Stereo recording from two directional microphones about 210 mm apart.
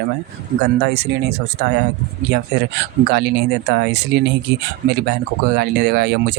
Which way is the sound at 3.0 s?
50° right (ahead or behind).